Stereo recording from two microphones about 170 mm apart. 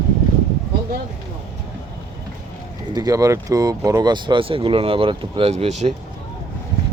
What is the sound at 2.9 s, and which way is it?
Speech, 20° right (ahead or behind).